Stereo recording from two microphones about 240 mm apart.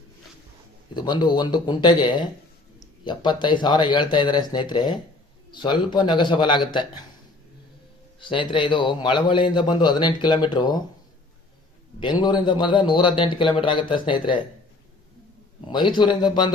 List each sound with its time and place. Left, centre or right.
0.9 s a man's voice: centre
8.2 s a man's voice: centre
12.2 s a man's voice: centre
15.6 s a man's voice: centre